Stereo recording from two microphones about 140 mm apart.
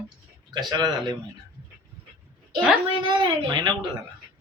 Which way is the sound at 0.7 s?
30° right (ahead or behind).